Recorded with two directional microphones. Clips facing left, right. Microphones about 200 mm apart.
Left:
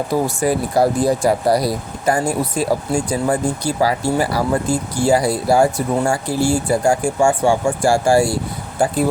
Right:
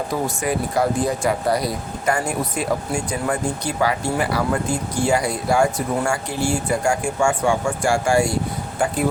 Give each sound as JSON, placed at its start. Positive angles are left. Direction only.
{"t": 0.3, "sound": "speech", "side_deg": 35}